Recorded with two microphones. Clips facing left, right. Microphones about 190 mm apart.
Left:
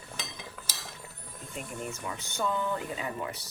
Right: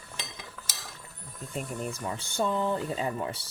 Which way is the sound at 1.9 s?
30° right (ahead or behind).